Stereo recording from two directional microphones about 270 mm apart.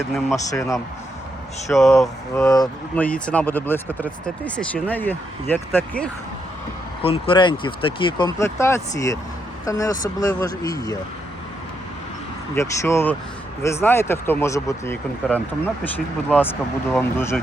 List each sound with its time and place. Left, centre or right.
0.0 s speech: centre
0.5 s speech: centre
1.7 s speech: centre
2.0 s speech: centre
7.0 s speech: centre
12.5 s speech: centre